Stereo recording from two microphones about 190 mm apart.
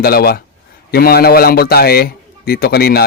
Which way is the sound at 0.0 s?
55° left (ahead or behind).